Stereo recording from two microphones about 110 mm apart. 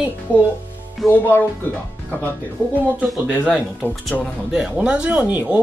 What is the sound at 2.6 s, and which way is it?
Speech, 15° right (ahead or behind).